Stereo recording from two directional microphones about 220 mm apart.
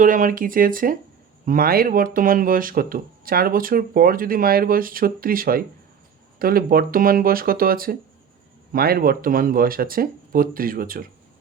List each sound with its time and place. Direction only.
0.0 s speech: 35° right (ahead or behind)